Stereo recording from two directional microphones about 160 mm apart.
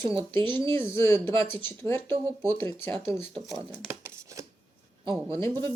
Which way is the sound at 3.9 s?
20° right (ahead or behind).